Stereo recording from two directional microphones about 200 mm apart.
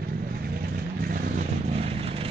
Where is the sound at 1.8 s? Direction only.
30° right (ahead or behind).